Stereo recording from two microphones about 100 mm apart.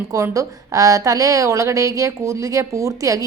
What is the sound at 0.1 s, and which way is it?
A woman's voice, 35° right (ahead or behind).